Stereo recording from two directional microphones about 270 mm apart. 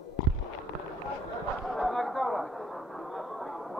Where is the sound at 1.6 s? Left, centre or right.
Centre.